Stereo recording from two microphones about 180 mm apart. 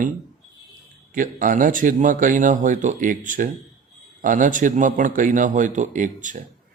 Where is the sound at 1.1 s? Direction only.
50° right (ahead or behind).